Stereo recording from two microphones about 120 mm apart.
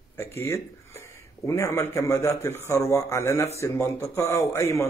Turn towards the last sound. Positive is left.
turn(degrees=25)  # may be behind; listen again after turning